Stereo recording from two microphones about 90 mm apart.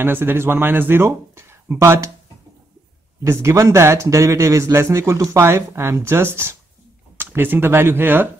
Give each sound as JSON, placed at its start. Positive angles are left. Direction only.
{"t": 0.0, "sound": "speech", "side_deg": -25}
{"t": 3.3, "sound": "a man's voice", "side_deg": -30}